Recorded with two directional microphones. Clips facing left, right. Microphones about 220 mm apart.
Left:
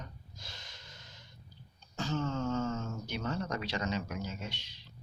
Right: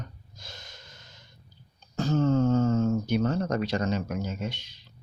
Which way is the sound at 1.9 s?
40° right (ahead or behind).